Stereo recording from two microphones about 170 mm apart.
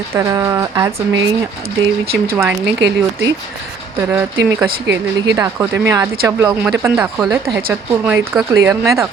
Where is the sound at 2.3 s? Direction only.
15° right (ahead or behind).